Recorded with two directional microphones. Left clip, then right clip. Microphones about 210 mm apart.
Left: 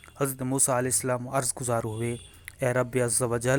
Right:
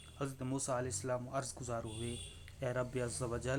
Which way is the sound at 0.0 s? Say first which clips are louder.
Left 13 dB; 40° left (ahead or behind).